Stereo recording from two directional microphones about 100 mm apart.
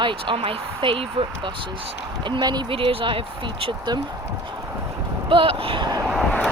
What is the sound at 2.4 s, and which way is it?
Speech, 45° right (ahead or behind).